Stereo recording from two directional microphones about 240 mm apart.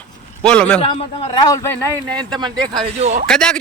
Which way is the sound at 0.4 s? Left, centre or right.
Centre.